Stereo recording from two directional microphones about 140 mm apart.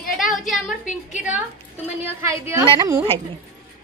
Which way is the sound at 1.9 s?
15° right (ahead or behind).